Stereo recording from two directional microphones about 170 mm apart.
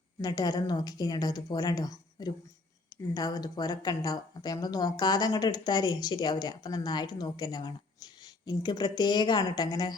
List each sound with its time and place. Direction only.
0.2 s speech: 20° left (ahead or behind)